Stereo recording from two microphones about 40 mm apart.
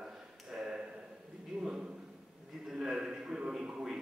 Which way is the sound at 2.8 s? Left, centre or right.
Centre.